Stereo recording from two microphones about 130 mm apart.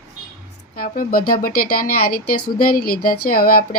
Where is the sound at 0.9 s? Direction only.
90° left.